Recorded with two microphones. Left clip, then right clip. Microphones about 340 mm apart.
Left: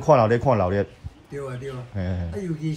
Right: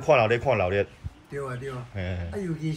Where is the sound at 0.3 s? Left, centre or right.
Right.